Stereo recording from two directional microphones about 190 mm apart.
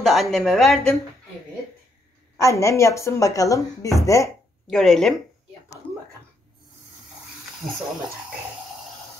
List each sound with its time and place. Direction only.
0.0 s speech: centre (ahead or behind)
2.4 s speech: 15° left (ahead or behind)
4.6 s speech: centre (ahead or behind)